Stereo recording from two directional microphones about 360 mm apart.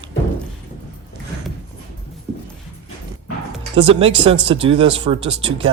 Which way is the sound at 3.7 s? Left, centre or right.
Centre.